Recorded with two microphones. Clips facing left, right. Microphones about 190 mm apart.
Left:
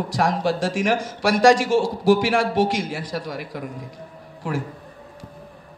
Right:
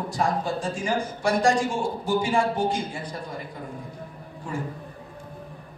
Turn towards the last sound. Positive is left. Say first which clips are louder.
# left 5 dB
turn(degrees=90)